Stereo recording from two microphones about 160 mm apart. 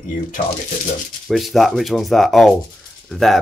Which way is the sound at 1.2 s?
Centre (ahead or behind).